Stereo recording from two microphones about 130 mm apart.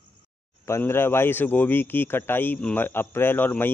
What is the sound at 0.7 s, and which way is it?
A man's voice, 20° left (ahead or behind).